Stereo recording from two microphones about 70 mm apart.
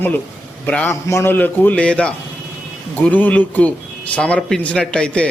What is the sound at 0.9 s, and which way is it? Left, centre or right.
A man's voice, left.